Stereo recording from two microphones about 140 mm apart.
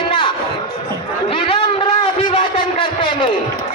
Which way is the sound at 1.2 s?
40° left (ahead or behind).